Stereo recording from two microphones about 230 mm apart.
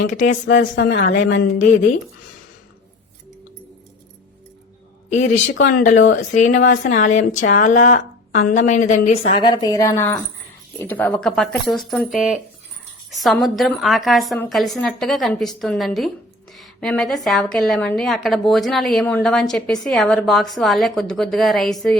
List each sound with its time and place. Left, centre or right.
0.1 s speech: left
0.5 s a sound: left
5.0 s speech: left
9.4 s a woman's voice: centre